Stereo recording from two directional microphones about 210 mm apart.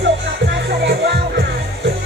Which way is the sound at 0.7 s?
50° right (ahead or behind).